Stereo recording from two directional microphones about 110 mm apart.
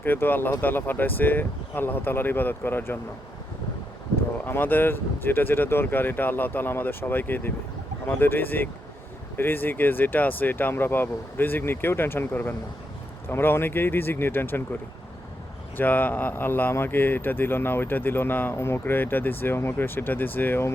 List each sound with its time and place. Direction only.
0.0 s speech: 20° left (ahead or behind)
4.4 s a man's voice: 20° left (ahead or behind)
15.8 s a man's voice: 15° left (ahead or behind)